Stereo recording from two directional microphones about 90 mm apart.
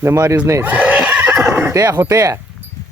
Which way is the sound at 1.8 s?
30° right (ahead or behind).